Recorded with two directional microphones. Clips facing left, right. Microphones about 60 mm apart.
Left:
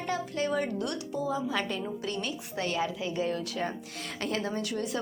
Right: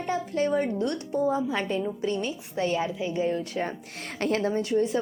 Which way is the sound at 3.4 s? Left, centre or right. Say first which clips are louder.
Right 3 dB; right.